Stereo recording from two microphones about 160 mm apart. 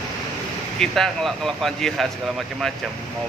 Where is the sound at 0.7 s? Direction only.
Centre (ahead or behind).